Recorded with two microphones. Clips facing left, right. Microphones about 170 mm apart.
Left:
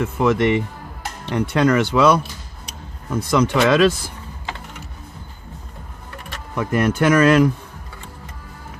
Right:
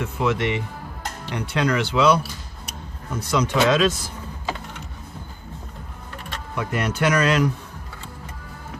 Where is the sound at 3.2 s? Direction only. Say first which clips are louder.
Left 4 dB; 55° left (ahead or behind).